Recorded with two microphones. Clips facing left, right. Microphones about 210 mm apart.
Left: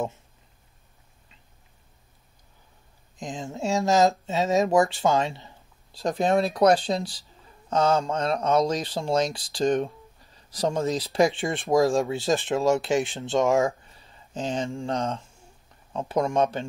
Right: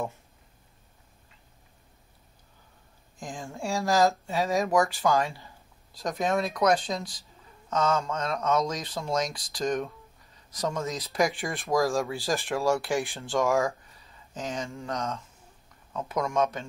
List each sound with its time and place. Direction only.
3.2 s speech: 20° left (ahead or behind)